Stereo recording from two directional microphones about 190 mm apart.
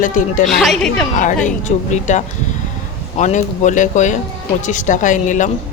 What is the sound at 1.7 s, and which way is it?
Speech, 40° left (ahead or behind).